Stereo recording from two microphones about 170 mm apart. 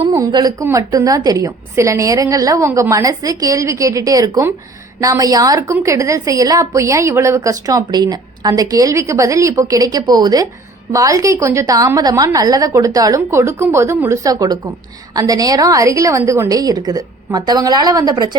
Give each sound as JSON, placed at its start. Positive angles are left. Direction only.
{"t": 0.1, "sound": "a woman's voice", "side_deg": -20}